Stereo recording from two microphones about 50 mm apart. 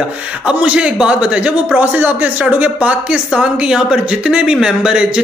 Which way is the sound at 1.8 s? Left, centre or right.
Right.